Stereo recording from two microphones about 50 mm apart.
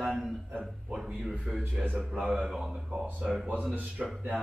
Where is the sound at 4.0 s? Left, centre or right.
Centre.